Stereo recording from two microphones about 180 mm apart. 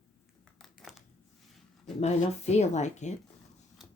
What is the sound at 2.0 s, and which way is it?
Speech, 40° left (ahead or behind).